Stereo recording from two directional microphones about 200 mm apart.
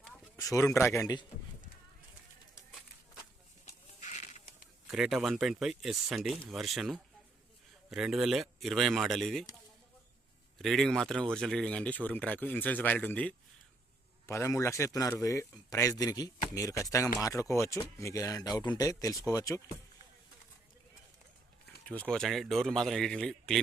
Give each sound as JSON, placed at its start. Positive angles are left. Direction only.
{"t": 0.3, "sound": "a man's voice", "side_deg": 15}
{"t": 4.0, "sound": "bird", "side_deg": 35}
{"t": 4.9, "sound": "speech", "side_deg": 0}
{"t": 10.6, "sound": "a man's voice", "side_deg": 0}
{"t": 22.1, "sound": "speech", "side_deg": 0}